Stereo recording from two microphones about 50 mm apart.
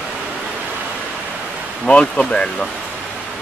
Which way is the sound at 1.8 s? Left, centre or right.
Left.